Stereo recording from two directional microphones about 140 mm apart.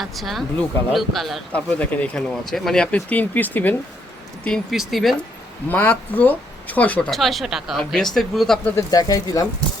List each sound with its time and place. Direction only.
0.0 s speech: centre (ahead or behind)
4.4 s speech: centre (ahead or behind)
5.6 s speech: 15° left (ahead or behind)
8.7 s speech: 25° left (ahead or behind)